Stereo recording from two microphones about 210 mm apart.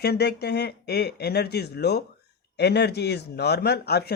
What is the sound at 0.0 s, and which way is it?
A man's voice, 50° left (ahead or behind).